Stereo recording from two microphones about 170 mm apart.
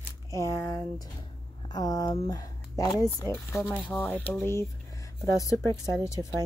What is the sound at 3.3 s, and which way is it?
Speech, 5° left (ahead or behind).